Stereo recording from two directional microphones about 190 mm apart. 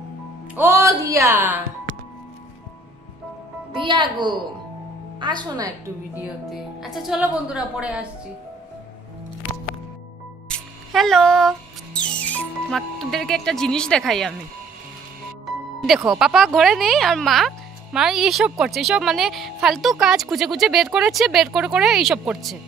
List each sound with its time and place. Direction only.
0.6 s speech: 15° right (ahead or behind)
3.7 s a woman's voice: 25° right (ahead or behind)
6.1 s speech: centre (ahead or behind)
10.5 s music: centre (ahead or behind)
16.0 s speech: centre (ahead or behind)